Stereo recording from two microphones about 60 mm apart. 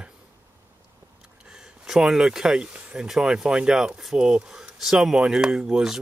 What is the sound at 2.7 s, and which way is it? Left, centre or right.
Speech, right.